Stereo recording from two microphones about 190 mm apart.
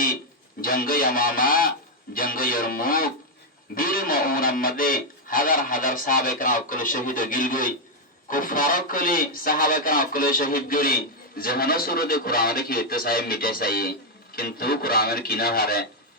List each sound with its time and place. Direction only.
0.6 s speech: 50° left (ahead or behind)